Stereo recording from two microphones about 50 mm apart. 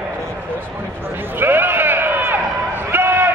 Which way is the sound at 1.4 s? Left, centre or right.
Right.